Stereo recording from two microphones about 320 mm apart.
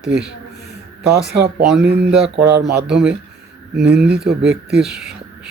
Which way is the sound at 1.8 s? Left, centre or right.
Right.